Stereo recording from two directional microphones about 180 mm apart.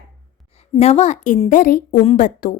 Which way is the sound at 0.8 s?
35° left (ahead or behind).